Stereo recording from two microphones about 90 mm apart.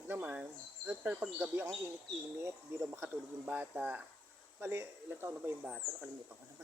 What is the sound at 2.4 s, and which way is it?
Speech, 30° right (ahead or behind).